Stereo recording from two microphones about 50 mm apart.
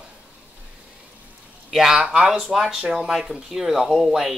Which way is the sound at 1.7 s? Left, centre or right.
Centre.